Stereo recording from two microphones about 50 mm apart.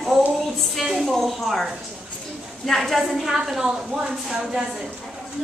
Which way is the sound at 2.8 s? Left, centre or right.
Centre.